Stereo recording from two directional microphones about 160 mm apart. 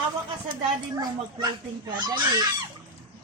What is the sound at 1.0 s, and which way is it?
Speech, 25° right (ahead or behind).